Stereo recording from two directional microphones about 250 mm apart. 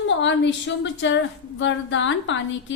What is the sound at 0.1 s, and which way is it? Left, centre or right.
A woman's voice, left.